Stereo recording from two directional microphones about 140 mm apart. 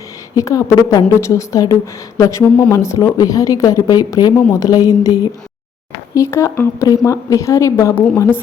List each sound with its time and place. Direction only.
0.3 s a woman's voice: 25° left (ahead or behind)
2.4 s speech: 10° left (ahead or behind)
2.7 s a woman's voice: 20° left (ahead or behind)